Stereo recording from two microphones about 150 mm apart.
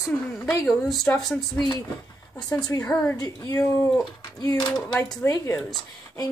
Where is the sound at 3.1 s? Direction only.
25° left (ahead or behind).